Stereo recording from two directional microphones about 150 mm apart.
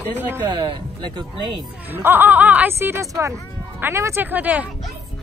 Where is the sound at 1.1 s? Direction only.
30° right (ahead or behind).